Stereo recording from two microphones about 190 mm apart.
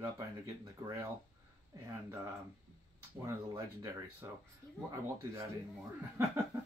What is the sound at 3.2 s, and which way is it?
Speech, 15° right (ahead or behind).